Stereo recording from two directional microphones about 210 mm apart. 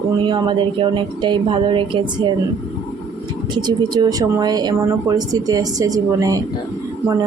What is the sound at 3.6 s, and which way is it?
A woman's voice, 20° right (ahead or behind).